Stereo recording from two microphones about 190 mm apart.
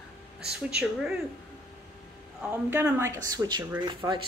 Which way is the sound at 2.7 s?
10° right (ahead or behind).